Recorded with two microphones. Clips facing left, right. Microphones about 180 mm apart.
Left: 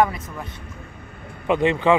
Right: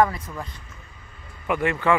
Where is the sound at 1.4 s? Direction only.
20° left (ahead or behind).